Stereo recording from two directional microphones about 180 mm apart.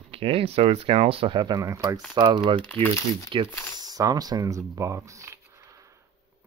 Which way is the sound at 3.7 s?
20° right (ahead or behind).